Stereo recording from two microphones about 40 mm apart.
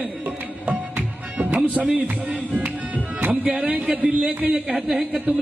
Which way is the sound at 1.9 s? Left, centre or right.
Right.